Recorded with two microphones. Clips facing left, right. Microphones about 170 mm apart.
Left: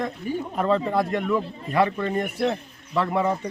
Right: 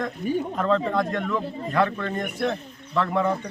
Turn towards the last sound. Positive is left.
turn(degrees=5)  # may be behind; listen again after turning